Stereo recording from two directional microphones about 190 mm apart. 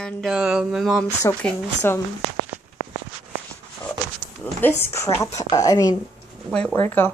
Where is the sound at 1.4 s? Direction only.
10° left (ahead or behind).